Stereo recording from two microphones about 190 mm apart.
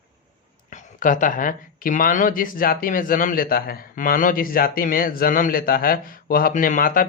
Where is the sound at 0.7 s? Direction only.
40° left (ahead or behind).